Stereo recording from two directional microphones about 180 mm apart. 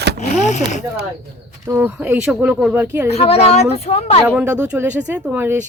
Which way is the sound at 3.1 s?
35° left (ahead or behind).